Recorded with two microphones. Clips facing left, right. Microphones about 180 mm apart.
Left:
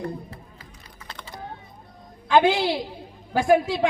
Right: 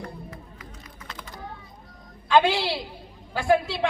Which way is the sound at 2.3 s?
20° left (ahead or behind).